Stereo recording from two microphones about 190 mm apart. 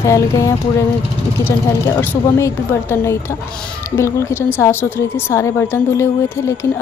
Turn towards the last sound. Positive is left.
turn(degrees=15)  # may be behind; listen again after turning